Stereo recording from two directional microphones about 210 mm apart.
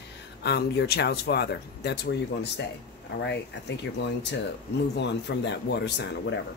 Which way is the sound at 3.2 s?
55° left (ahead or behind).